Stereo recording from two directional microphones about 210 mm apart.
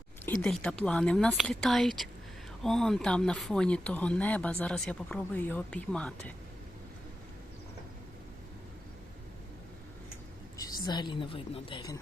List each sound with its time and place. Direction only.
0.4 s speech: 5° left (ahead or behind)
10.8 s a woman's voice: 20° left (ahead or behind)